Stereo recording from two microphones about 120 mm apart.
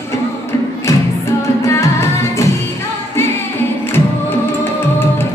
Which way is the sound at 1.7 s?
25° left (ahead or behind).